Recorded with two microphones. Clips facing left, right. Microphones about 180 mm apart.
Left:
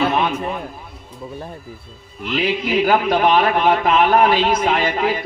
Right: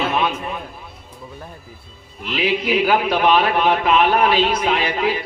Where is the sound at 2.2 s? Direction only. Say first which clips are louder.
Even; 45° left (ahead or behind).